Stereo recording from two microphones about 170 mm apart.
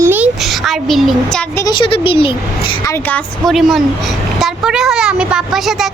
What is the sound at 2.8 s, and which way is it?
A woman's voice, 10° left (ahead or behind).